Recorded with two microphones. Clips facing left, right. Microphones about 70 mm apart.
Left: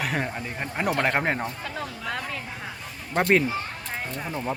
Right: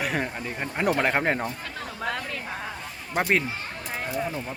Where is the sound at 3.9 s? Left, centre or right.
Centre.